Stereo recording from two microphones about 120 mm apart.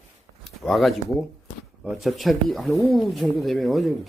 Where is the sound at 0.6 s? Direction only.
Centre (ahead or behind).